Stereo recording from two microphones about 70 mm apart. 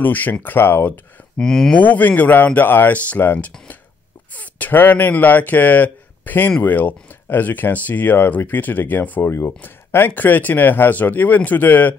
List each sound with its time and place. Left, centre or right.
0.0 s speech: left
1.4 s speech: centre
1.9 s speech: left